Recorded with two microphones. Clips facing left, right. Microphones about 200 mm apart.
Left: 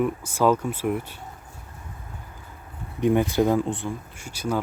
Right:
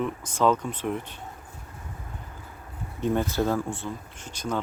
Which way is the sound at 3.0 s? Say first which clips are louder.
Left 5 dB; 15° left (ahead or behind).